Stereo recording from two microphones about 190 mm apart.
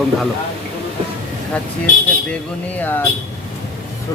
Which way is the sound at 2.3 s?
10° left (ahead or behind).